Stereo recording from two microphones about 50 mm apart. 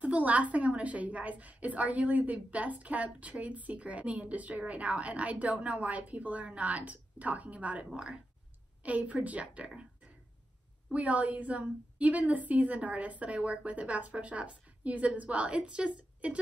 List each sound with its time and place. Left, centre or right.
0.0 s a woman's voice: right
10.9 s a woman's voice: right